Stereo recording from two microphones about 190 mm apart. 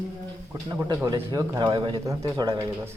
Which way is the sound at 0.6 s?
15° right (ahead or behind).